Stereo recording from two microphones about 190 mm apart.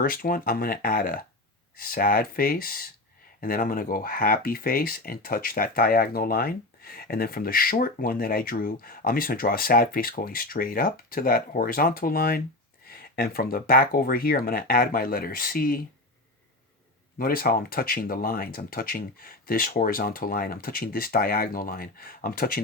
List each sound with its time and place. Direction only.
0.0 s speech: 50° left (ahead or behind)
17.2 s speech: 50° left (ahead or behind)